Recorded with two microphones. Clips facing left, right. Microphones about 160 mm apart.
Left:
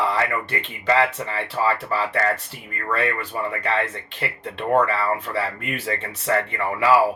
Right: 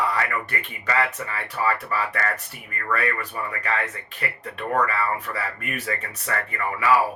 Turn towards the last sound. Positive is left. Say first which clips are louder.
# left 3 dB
turn(degrees=25)  # may be behind; listen again after turning